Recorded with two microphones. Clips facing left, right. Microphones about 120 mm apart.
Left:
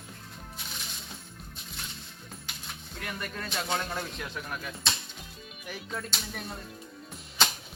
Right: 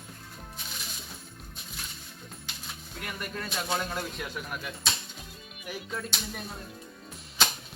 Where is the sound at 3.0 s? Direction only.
5° right (ahead or behind).